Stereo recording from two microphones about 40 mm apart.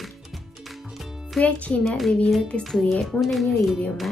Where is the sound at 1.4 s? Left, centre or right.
Left.